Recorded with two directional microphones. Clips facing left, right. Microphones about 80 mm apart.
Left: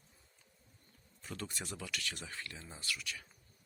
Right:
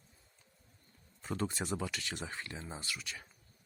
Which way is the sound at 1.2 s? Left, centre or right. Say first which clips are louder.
Right 8 dB; right.